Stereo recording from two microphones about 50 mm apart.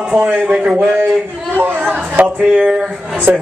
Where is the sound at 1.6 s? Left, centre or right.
Right.